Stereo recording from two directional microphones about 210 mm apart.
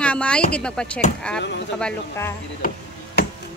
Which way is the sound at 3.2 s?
50° left (ahead or behind).